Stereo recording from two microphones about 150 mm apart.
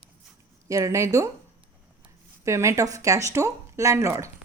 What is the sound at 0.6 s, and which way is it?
Speech, 20° right (ahead or behind).